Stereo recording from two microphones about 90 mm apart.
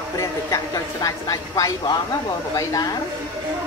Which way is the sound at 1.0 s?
40° left (ahead or behind).